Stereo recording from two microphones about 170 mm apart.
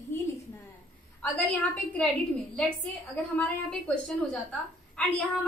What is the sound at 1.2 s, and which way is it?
Speech, 10° left (ahead or behind).